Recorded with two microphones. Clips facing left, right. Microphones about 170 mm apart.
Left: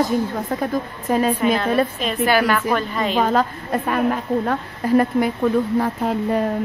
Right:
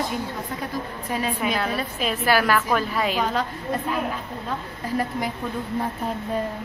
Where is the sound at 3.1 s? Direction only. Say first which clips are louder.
Left 10 dB; 50° left (ahead or behind).